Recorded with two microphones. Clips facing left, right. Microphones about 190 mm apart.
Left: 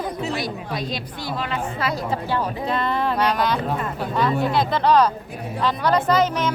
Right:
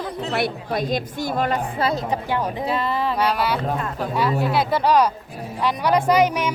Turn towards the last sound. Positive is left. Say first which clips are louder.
# right 2 dB
turn(degrees=-10)  # may be behind; listen again after turning